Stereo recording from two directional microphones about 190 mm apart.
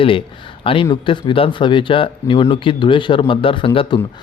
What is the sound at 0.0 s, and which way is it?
Speech, 25° left (ahead or behind).